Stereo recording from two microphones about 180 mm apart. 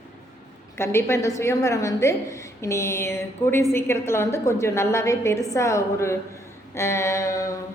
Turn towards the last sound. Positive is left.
turn(degrees=20)  # may be behind; listen again after turning